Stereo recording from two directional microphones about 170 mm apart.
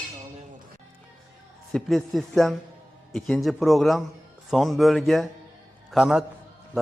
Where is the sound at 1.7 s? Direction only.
Centre (ahead or behind).